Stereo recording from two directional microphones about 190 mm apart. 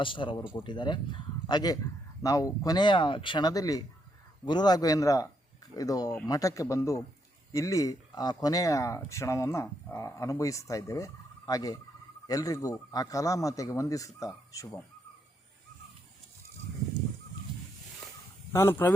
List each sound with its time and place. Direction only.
0.0 s speech: 25° left (ahead or behind)
18.5 s speech: 15° left (ahead or behind)